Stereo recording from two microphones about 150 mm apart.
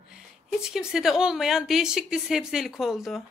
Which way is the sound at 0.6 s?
5° right (ahead or behind).